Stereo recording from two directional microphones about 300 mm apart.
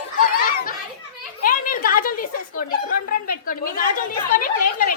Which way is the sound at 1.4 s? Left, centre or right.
Left.